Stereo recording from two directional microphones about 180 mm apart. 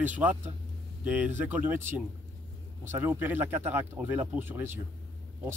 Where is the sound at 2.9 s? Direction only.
15° right (ahead or behind).